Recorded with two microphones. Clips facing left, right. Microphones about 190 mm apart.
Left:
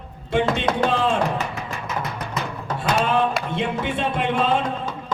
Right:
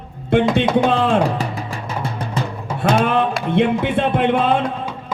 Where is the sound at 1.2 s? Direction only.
35° right (ahead or behind).